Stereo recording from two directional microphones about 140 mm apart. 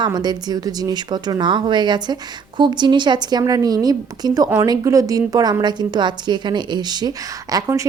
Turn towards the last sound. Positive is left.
turn(degrees=-25)  # may be behind; listen again after turning